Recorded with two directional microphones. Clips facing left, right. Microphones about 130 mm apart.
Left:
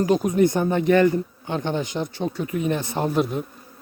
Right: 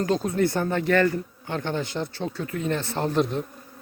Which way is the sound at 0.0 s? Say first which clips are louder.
Left 4 dB; 15° left (ahead or behind).